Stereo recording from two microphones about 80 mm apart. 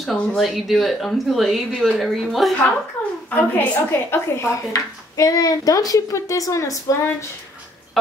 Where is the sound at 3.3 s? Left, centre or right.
Left.